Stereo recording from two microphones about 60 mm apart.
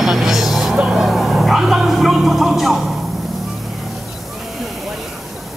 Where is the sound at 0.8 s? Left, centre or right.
Centre.